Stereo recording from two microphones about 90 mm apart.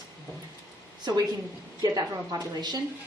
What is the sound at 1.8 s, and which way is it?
A woman's voice, 45° right (ahead or behind).